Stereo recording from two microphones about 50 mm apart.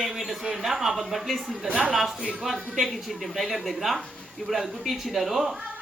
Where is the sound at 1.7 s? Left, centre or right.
Right.